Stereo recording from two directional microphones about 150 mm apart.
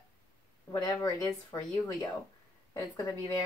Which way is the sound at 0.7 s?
25° left (ahead or behind).